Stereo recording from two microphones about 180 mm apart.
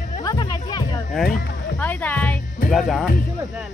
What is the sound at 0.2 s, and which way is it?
Music, 20° left (ahead or behind).